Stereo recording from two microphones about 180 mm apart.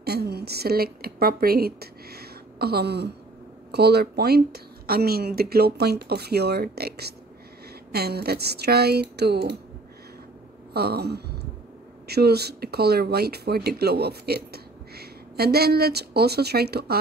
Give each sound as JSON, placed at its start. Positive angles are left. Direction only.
{"t": 0.0, "sound": "a woman's voice", "side_deg": -65}
{"t": 10.7, "sound": "speech", "side_deg": -60}